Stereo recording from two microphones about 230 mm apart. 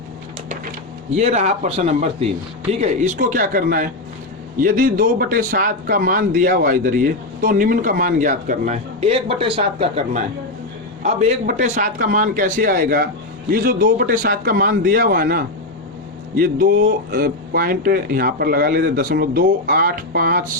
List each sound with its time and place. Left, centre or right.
1.1 s a man's voice: right